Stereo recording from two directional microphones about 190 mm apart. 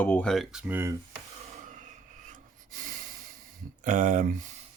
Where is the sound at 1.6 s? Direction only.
40° right (ahead or behind).